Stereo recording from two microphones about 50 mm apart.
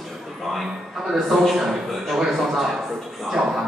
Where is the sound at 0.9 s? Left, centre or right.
Centre.